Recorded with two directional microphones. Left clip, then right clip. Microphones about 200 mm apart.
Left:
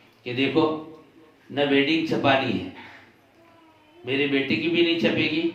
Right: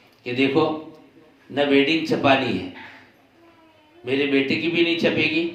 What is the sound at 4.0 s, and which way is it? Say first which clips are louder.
A man's voice: right 3 dB; 25° right (ahead or behind).